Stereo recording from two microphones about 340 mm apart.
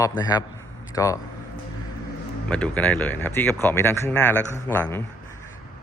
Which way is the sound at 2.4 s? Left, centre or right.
Centre.